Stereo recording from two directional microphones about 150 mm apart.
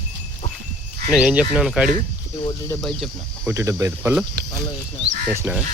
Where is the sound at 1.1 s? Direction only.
5° right (ahead or behind).